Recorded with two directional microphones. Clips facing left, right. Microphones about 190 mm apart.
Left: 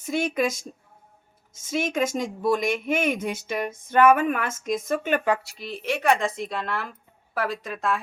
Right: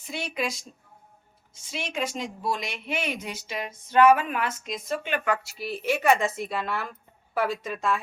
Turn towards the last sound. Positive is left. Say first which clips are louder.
# even
turn(degrees=0)  # may be behind; listen again after turning